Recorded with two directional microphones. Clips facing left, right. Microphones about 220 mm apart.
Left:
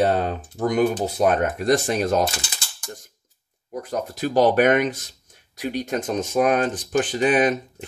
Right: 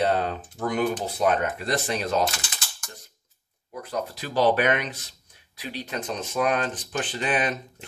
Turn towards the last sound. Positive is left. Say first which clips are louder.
# left 7 dB
turn(degrees=45)  # may be behind; listen again after turning